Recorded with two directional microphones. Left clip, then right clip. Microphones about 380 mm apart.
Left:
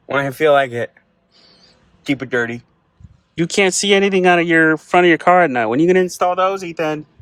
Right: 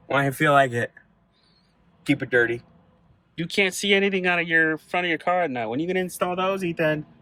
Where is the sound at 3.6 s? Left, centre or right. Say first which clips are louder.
Left 6 dB; centre.